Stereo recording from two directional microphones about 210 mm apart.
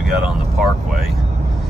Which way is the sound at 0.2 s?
Centre (ahead or behind).